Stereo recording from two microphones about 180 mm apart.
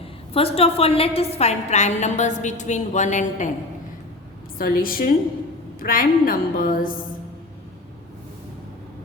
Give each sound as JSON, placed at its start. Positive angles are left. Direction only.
{"t": 0.3, "sound": "a woman's voice", "side_deg": 30}
{"t": 4.5, "sound": "a woman's voice", "side_deg": 55}